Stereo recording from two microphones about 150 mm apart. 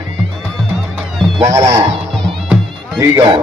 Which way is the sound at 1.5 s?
20° right (ahead or behind).